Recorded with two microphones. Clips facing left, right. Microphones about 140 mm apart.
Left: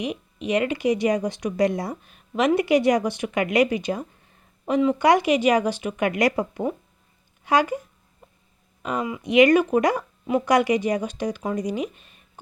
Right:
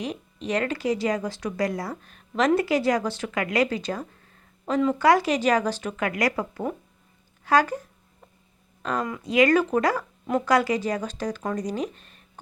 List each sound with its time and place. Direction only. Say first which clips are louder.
0.0 s speech: left 3 dB; 10° left (ahead or behind)
2.0 s speech: left 1 dB; 10° left (ahead or behind)
6.1 s speech: left 4 dB; 25° left (ahead or behind)
8.8 s speech: left 1 dB; 10° left (ahead or behind)
9.2 s speech: left 4 dB; 20° left (ahead or behind)